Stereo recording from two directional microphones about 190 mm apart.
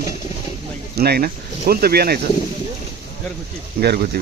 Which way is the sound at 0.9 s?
55° right (ahead or behind).